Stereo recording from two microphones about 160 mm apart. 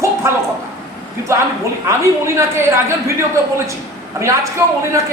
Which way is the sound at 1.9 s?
15° right (ahead or behind).